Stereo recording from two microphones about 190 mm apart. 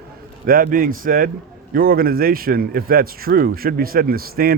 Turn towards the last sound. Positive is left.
turn(degrees=-50)  # may be behind; listen again after turning